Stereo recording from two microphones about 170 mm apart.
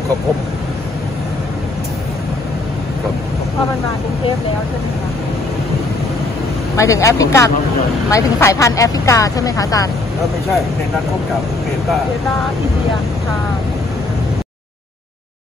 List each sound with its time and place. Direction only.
6.8 s speech: 15° left (ahead or behind)